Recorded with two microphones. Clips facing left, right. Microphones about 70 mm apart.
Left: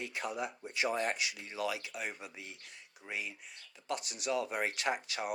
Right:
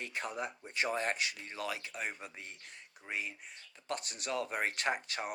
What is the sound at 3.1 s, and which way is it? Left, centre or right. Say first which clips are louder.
Speech: right 1 dB; right.